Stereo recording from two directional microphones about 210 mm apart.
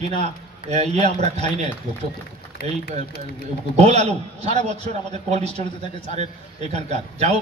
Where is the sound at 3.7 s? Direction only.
30° right (ahead or behind).